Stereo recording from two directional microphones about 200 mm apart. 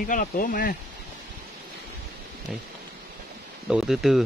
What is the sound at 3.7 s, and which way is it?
Speech, centre (ahead or behind).